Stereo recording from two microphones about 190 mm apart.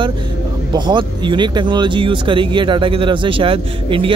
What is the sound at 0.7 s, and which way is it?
Speech, 25° right (ahead or behind).